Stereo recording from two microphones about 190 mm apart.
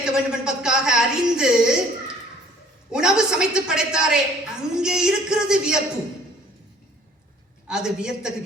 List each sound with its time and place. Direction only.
0.0 s a woman's voice: 5° right (ahead or behind)
2.9 s a woman's voice: 5° right (ahead or behind)
7.7 s a woman's voice: 5° right (ahead or behind)